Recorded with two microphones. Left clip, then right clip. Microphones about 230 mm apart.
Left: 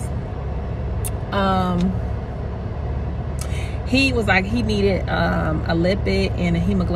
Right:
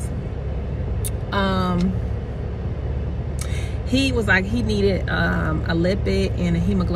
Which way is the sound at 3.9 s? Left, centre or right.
Centre.